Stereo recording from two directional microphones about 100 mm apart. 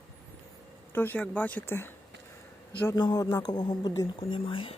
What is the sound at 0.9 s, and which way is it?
Speech, 20° left (ahead or behind).